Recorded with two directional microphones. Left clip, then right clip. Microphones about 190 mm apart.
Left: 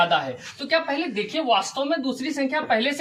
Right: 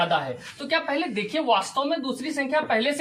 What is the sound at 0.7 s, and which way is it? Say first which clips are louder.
A woman's voice: left 2 dB; 20° right (ahead or behind).